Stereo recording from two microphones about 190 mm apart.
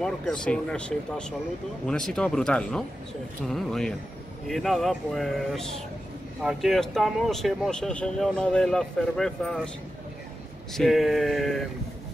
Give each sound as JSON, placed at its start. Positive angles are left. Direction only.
{"t": 0.0, "sound": "speech", "side_deg": 5}
{"t": 10.7, "sound": "speech", "side_deg": 0}